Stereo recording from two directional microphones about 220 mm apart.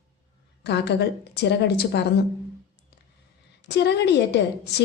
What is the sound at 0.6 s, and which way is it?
A woman's voice, 50° left (ahead or behind).